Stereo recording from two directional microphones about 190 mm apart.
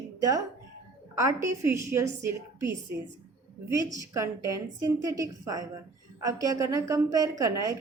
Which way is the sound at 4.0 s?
15° right (ahead or behind).